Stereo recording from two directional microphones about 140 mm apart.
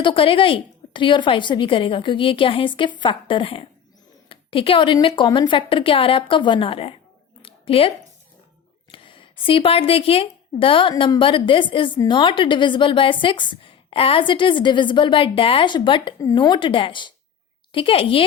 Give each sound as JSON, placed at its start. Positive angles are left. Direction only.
{"t": 0.0, "sound": "a woman's voice", "side_deg": 40}
{"t": 7.4, "sound": "a sound", "side_deg": 40}
{"t": 8.9, "sound": "a woman's voice", "side_deg": 40}